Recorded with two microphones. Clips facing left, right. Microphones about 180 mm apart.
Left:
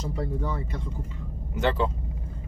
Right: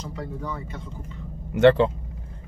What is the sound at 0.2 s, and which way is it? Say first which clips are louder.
Speech: left 2 dB; 25° left (ahead or behind).